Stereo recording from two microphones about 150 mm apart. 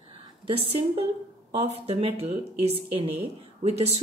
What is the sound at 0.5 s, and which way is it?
A woman's voice, 40° right (ahead or behind).